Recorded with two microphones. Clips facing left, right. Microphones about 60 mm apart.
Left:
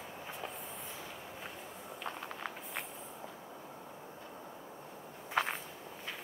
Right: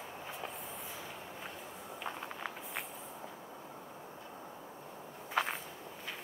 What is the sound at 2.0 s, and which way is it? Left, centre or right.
Walk, centre.